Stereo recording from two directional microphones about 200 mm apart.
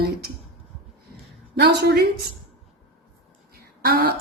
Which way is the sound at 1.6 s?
55° right (ahead or behind).